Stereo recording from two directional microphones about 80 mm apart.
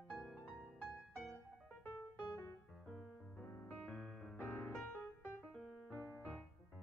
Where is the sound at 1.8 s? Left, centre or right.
Left.